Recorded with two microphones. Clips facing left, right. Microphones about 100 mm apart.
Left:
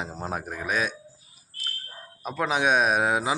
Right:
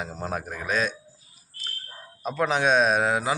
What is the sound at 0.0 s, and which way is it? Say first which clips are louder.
Speech: right 1 dB; 25° left (ahead or behind).